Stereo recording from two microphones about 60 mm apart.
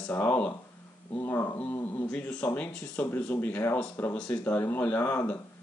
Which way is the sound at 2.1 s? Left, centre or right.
Left.